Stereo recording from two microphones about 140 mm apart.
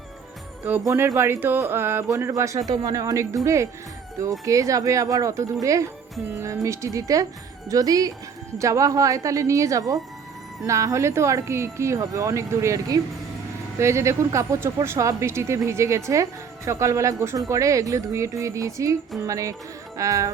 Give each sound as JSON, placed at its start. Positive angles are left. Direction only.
{"t": 0.9, "sound": "speech", "side_deg": -20}